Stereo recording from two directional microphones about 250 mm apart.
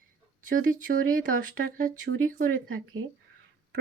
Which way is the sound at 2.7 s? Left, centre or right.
Right.